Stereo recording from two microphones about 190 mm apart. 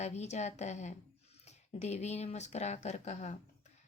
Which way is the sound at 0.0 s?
35° left (ahead or behind).